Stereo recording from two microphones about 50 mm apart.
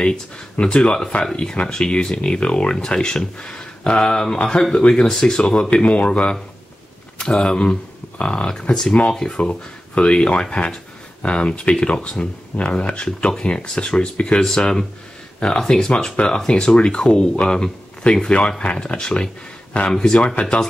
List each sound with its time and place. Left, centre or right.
0.0 s speech: centre